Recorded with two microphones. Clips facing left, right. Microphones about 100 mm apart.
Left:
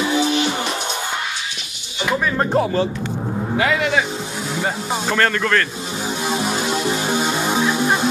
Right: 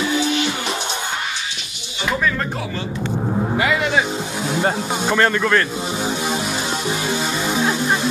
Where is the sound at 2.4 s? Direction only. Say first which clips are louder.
Left 8 dB; 40° left (ahead or behind).